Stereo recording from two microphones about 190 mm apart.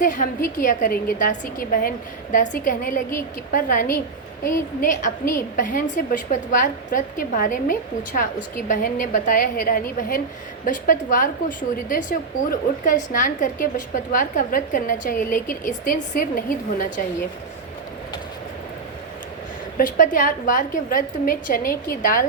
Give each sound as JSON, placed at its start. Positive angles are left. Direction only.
{"t": 0.0, "sound": "a woman's voice", "side_deg": 45}
{"t": 19.7, "sound": "a woman's voice", "side_deg": 45}